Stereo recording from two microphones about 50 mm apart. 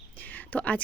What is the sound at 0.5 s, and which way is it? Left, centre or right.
Speech, left.